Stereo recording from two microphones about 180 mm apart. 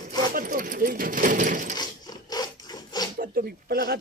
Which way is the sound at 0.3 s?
50° right (ahead or behind).